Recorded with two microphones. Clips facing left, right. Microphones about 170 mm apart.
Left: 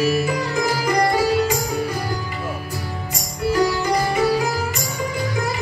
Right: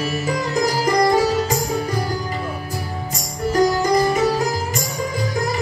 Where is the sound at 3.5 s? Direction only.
40° right (ahead or behind).